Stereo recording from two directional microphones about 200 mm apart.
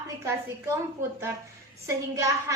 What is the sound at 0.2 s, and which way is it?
Speech, 15° right (ahead or behind).